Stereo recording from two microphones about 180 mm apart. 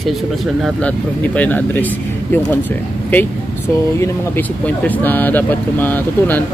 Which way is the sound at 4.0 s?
10° left (ahead or behind).